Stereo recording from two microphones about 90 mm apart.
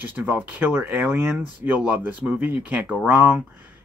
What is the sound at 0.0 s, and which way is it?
Speech, 20° right (ahead or behind).